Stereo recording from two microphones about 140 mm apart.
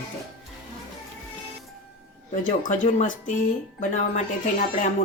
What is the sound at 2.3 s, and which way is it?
Speech, 65° left (ahead or behind).